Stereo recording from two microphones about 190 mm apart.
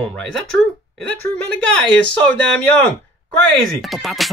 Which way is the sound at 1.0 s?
5° left (ahead or behind).